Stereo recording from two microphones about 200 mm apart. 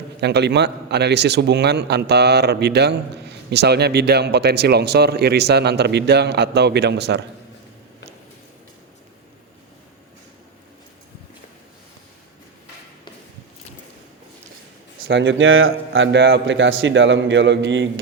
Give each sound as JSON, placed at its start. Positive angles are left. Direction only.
{"t": 0.2, "sound": "a man's voice", "side_deg": -55}
{"t": 15.0, "sound": "a man's voice", "side_deg": -65}